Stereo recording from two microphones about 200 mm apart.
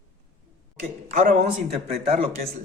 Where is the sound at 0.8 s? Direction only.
45° right (ahead or behind).